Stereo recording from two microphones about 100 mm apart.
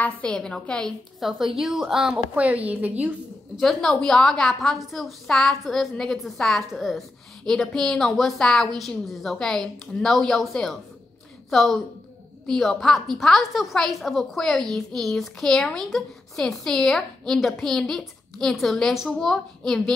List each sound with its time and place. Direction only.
0.0 s a woman's voice: 10° left (ahead or behind)
1.2 s a woman's voice: 5° right (ahead or behind)
3.5 s a woman's voice: 5° left (ahead or behind)